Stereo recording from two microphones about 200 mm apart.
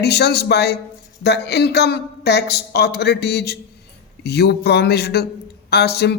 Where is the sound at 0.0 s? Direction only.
55° left (ahead or behind).